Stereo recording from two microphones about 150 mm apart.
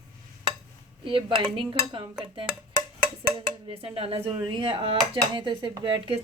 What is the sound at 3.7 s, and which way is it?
A woman's voice, 40° right (ahead or behind).